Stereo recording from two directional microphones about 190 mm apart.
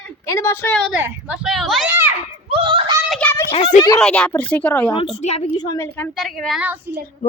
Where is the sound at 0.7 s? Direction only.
5° right (ahead or behind).